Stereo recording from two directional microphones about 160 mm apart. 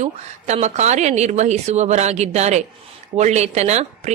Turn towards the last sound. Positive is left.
turn(degrees=-45)  # may be behind; listen again after turning